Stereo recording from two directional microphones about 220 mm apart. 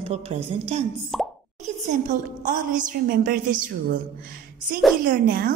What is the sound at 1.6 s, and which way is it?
A woman's voice, 35° right (ahead or behind).